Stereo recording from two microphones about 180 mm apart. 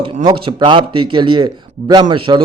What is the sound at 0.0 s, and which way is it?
A man's voice, 25° right (ahead or behind).